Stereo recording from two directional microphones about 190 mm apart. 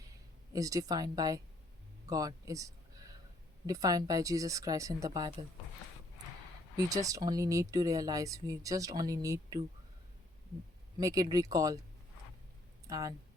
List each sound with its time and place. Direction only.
0.5 s speech: 20° right (ahead or behind)
2.0 s a sound: 20° right (ahead or behind)
3.7 s speech: 20° right (ahead or behind)
6.7 s speech: 20° right (ahead or behind)
11.0 s speech: 20° right (ahead or behind)
12.9 s speech: 15° right (ahead or behind)